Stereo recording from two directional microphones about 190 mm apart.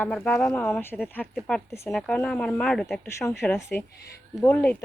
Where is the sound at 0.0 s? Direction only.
5° left (ahead or behind).